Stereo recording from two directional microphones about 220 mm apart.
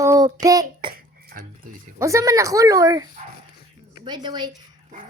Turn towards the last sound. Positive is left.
turn(degrees=-20)  # may be behind; listen again after turning